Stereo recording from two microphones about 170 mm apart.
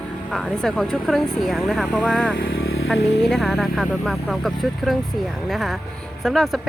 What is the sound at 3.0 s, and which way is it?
Speech, 90° left.